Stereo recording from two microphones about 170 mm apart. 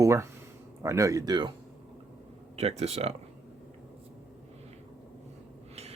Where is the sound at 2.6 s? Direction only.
40° right (ahead or behind).